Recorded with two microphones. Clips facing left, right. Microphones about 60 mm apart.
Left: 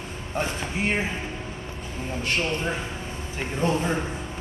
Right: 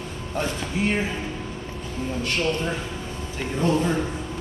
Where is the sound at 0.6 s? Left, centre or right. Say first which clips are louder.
Right 2 dB; left.